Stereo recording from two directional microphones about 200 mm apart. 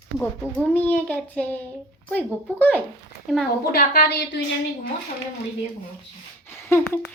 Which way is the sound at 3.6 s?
50° left (ahead or behind).